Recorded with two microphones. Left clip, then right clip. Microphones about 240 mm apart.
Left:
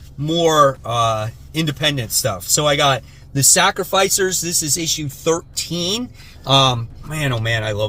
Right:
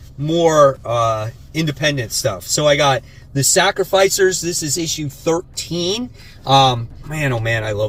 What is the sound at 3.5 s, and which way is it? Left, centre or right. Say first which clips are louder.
Speech: right 1 dB; centre.